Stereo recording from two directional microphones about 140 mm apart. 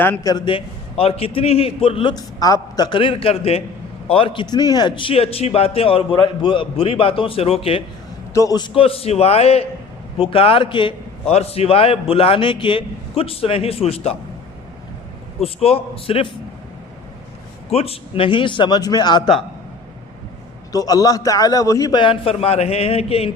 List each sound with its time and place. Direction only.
0.0 s a man's voice: 15° left (ahead or behind)
0.3 s a man's voice: 35° left (ahead or behind)
2.1 s a man's voice: 25° left (ahead or behind); by 7.8 s 45° left (ahead or behind)
8.3 s a man's voice: 25° left (ahead or behind); by 14.2 s 45° left (ahead or behind)
15.4 s a man's voice: 45° left (ahead or behind)
17.7 s a man's voice: 45° left (ahead or behind); by 19.3 s 30° left (ahead or behind)
20.7 s a man's voice: 25° left (ahead or behind); by 23.3 s 45° left (ahead or behind)